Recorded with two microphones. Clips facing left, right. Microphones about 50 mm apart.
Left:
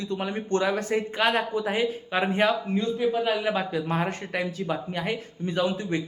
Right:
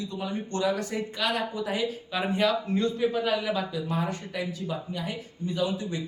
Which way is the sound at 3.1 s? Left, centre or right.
Centre.